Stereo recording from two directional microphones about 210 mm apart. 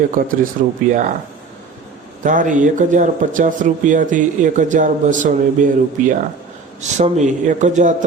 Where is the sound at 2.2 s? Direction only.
40° right (ahead or behind).